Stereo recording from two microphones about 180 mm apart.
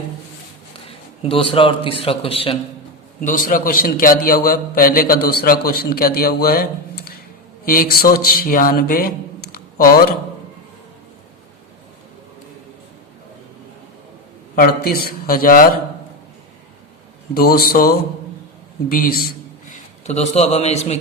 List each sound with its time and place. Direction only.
0.9 s a man's voice: 30° left (ahead or behind)
3.2 s a man's voice: 50° left (ahead or behind)
14.5 s a man's voice: 55° left (ahead or behind)
17.3 s a man's voice: 55° left (ahead or behind)
20.1 s a man's voice: 35° left (ahead or behind)